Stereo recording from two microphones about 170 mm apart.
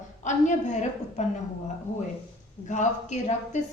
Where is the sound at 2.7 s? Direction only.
45° left (ahead or behind).